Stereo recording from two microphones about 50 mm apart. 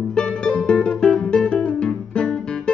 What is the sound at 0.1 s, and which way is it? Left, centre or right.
Music, centre.